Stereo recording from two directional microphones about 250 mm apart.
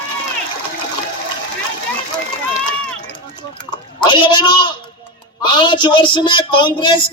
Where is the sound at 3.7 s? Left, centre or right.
Centre.